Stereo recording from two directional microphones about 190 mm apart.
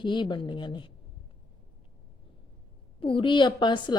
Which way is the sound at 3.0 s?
25° left (ahead or behind).